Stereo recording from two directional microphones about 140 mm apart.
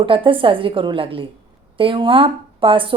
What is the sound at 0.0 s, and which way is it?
A woman's voice, 40° right (ahead or behind).